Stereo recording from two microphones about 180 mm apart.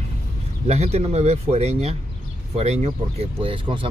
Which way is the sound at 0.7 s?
35° right (ahead or behind).